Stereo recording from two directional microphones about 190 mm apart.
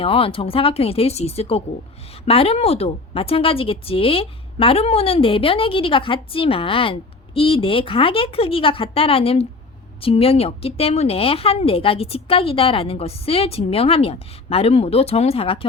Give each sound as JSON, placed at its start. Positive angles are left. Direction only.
{"t": 0.0, "sound": "speech", "side_deg": 30}